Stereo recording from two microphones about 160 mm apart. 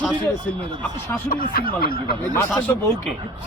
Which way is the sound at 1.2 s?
65° left (ahead or behind).